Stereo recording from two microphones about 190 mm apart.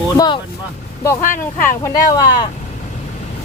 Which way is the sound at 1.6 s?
15° left (ahead or behind).